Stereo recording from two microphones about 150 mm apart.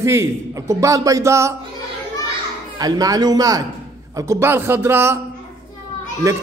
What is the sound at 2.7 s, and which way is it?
A man's voice, 25° right (ahead or behind).